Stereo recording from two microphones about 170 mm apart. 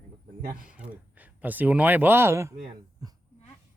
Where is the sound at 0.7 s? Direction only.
10° right (ahead or behind).